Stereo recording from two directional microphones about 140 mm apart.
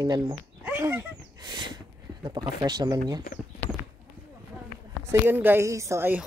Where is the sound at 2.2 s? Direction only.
30° right (ahead or behind).